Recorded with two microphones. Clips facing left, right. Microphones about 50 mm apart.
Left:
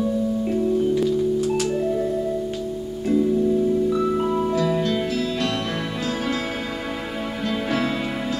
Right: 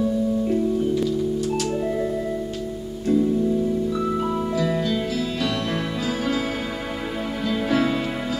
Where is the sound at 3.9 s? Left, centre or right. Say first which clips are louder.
Left 3 dB; centre.